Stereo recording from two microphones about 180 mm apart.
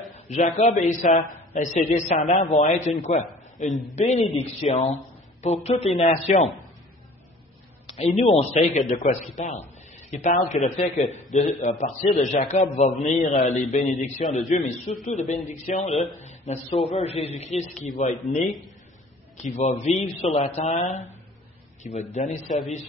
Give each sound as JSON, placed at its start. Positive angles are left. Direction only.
{"t": 0.3, "sound": "a man's voice", "side_deg": 40}
{"t": 8.2, "sound": "a man's voice", "side_deg": 35}